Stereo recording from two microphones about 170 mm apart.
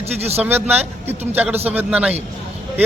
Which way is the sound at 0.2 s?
40° right (ahead or behind).